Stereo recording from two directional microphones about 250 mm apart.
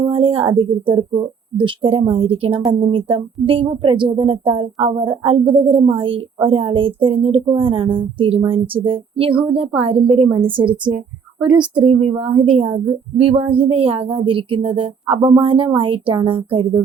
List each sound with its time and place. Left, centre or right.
0.0 s a sound: right
0.9 s speech: centre
11.3 s a woman's voice: centre
11.8 s speech: right